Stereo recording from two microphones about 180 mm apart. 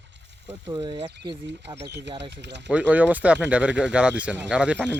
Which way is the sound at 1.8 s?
70° right (ahead or behind).